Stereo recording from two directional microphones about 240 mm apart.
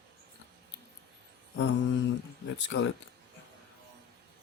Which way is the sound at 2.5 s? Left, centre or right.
Left.